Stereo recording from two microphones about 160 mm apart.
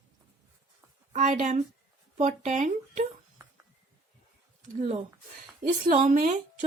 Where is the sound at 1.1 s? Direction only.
45° right (ahead or behind).